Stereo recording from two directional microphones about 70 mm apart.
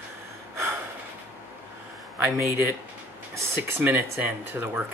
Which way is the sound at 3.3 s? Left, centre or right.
Right.